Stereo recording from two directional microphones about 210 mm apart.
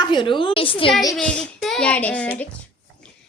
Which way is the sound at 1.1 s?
5° left (ahead or behind).